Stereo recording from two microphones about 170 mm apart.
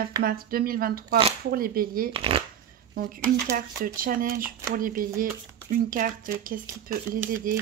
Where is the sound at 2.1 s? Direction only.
30° right (ahead or behind).